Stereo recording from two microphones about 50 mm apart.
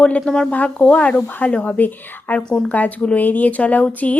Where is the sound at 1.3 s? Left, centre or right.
Left.